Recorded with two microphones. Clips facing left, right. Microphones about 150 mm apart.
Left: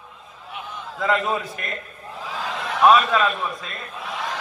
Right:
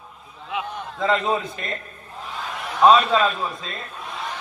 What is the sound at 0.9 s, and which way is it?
Speech, 20° right (ahead or behind).